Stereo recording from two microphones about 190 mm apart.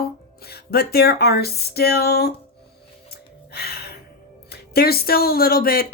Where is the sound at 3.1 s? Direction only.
55° left (ahead or behind).